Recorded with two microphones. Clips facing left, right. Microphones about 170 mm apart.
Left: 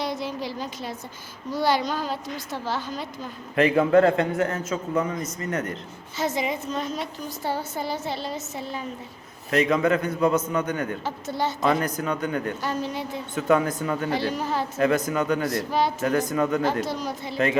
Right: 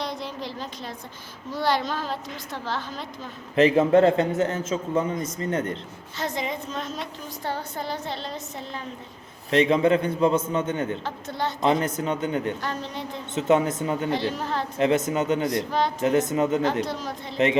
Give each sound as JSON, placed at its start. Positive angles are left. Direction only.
{"t": 0.0, "sound": "a sound", "side_deg": 5}
{"t": 1.5, "sound": "a woman's voice", "side_deg": 0}
{"t": 3.5, "sound": "a man's voice", "side_deg": -25}
{"t": 6.1, "sound": "a woman's voice", "side_deg": 5}
{"t": 9.5, "sound": "a man's voice", "side_deg": -30}
{"t": 11.0, "sound": "a woman's voice", "side_deg": 5}
{"t": 11.6, "sound": "a man's voice", "side_deg": -25}
{"t": 12.6, "sound": "a woman's voice", "side_deg": 5}
{"t": 13.3, "sound": "a man's voice", "side_deg": -25}
{"t": 14.3, "sound": "a woman's voice", "side_deg": 0}
{"t": 14.8, "sound": "a man's voice", "side_deg": -25}
{"t": 16.8, "sound": "a woman's voice", "side_deg": 0}
{"t": 17.3, "sound": "a man's voice", "side_deg": -20}